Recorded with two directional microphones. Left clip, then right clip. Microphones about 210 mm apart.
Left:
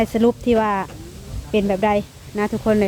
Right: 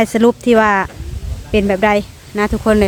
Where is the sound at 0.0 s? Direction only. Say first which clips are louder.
Right 5 dB; 20° right (ahead or behind).